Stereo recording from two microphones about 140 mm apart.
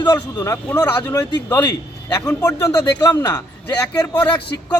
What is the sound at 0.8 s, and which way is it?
Speech, 10° left (ahead or behind).